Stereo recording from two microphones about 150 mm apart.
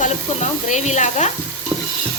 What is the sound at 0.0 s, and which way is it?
Sizzle, 50° left (ahead or behind).